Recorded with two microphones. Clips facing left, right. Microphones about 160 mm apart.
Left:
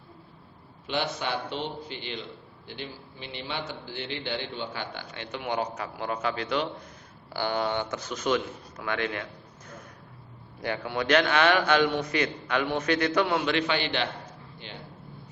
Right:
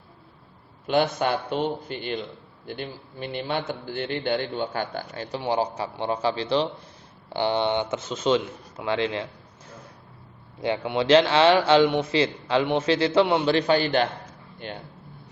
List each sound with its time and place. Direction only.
0.9 s a man's voice: 50° right (ahead or behind); by 9.2 s 25° right (ahead or behind)
10.6 s a man's voice: 25° right (ahead or behind); by 14.8 s 50° right (ahead or behind)